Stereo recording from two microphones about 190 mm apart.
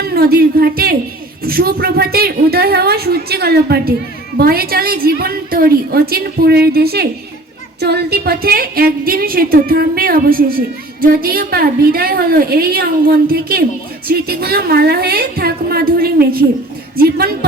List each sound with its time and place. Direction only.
0.0 s a woman's voice: 55° right (ahead or behind)